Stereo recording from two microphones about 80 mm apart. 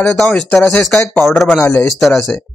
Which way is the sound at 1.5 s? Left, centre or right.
Left.